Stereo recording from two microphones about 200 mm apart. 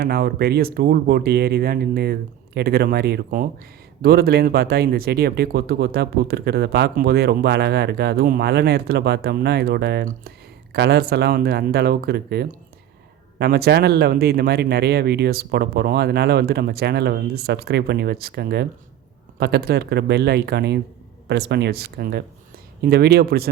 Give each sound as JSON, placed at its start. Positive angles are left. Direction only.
{"t": 0.0, "sound": "speech", "side_deg": -50}